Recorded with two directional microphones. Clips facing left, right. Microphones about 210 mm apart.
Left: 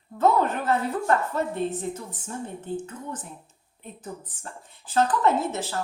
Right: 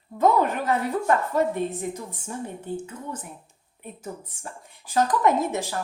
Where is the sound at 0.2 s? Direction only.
10° right (ahead or behind).